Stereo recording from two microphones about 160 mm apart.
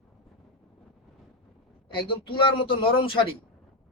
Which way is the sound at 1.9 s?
30° left (ahead or behind).